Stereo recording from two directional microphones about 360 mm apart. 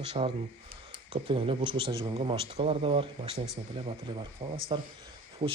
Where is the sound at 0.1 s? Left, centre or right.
Centre.